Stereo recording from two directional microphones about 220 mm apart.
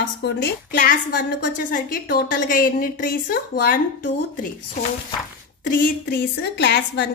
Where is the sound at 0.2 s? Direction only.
50° left (ahead or behind).